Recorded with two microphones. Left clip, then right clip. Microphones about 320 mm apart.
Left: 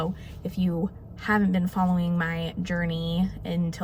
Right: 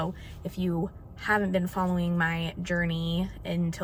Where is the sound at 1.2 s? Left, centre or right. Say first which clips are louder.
Even; centre.